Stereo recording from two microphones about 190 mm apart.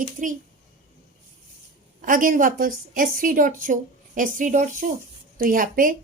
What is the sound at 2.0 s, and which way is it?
A woman's voice, 45° right (ahead or behind).